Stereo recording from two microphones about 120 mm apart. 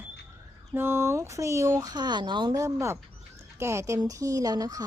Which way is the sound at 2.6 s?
25° right (ahead or behind).